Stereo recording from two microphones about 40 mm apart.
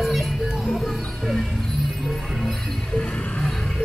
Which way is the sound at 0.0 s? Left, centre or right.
Centre.